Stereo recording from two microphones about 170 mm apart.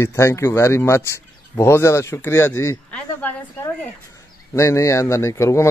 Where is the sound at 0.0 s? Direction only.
15° left (ahead or behind).